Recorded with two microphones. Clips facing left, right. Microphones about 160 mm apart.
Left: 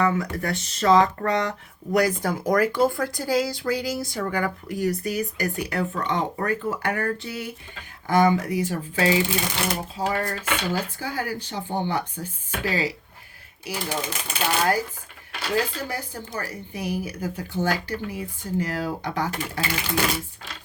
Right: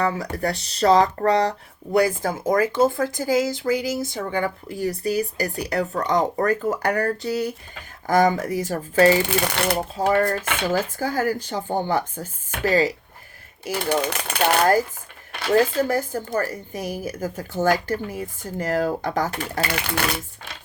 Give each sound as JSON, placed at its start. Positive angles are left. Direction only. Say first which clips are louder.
{"t": 0.0, "sound": "speech", "louder": "even", "side_deg": -35}
{"t": 13.7, "sound": "speech", "louder": "right 6 dB", "side_deg": -65}
{"t": 14.6, "sound": "speech", "louder": "right 5 dB", "side_deg": -45}